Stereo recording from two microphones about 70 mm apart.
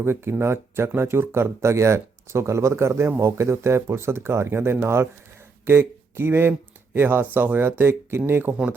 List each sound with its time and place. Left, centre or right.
0.0 s speech: right